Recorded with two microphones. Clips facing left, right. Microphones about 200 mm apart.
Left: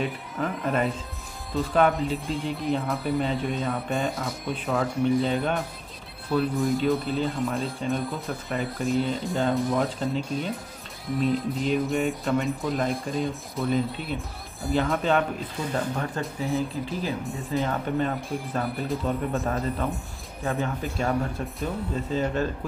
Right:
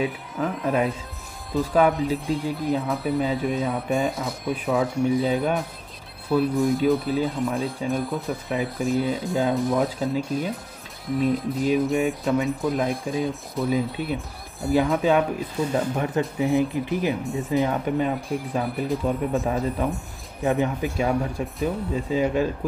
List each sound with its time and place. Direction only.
0.0 s speech: centre (ahead or behind)